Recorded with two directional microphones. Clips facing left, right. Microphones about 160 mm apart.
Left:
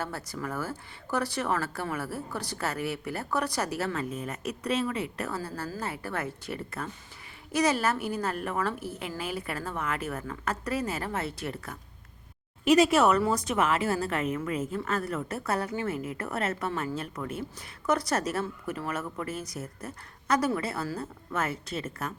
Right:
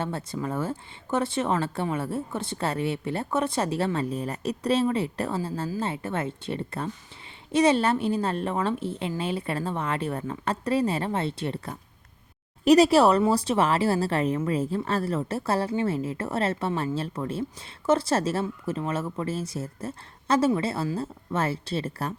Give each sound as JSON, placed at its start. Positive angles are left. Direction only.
{"t": 0.0, "sound": "speech", "side_deg": -25}